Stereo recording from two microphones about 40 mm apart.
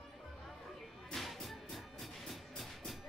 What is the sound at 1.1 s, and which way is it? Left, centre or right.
Music, centre.